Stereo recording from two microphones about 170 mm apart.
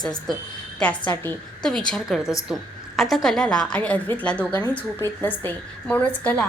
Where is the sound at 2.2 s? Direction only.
20° left (ahead or behind).